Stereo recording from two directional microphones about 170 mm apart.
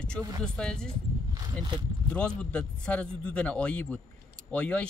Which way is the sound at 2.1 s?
5° left (ahead or behind).